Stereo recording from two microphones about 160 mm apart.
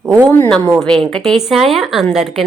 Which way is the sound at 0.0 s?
15° right (ahead or behind).